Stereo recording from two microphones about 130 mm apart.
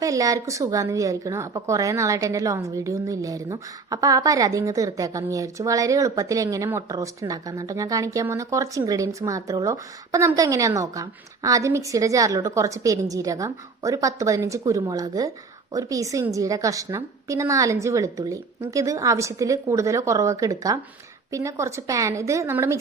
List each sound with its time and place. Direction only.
0.0 s speech: 25° right (ahead or behind)